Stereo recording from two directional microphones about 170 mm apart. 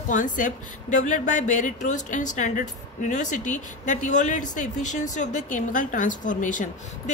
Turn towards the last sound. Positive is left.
turn(degrees=50)  # may be behind; listen again after turning